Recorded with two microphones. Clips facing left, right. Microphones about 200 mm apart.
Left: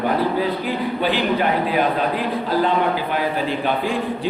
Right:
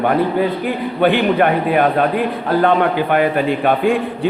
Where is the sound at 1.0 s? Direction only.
60° right (ahead or behind).